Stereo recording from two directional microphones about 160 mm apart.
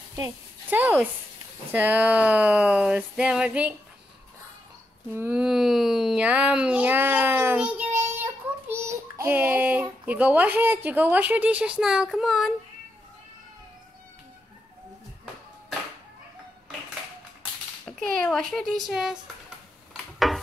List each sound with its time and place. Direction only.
0.1 s a woman's voice: 15° right (ahead or behind)
5.1 s a child's voice: 10° right (ahead or behind)
17.8 s a child's voice: 5° left (ahead or behind)